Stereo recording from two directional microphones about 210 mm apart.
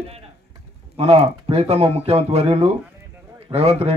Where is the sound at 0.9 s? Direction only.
30° right (ahead or behind).